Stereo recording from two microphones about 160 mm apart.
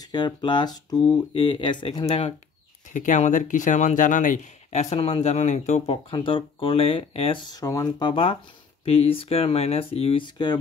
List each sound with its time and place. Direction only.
0.1 s speech: 30° left (ahead or behind)
2.9 s speech: 50° left (ahead or behind); by 7.5 s 35° left (ahead or behind)
7.6 s speech: 20° left (ahead or behind)
8.1 s speech: 35° left (ahead or behind)